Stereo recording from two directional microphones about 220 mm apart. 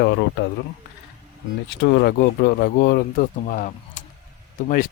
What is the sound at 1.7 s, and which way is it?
Speech, 55° left (ahead or behind).